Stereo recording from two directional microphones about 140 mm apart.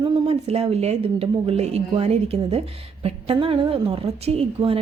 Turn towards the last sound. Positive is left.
turn(degrees=-45)  # may be behind; listen again after turning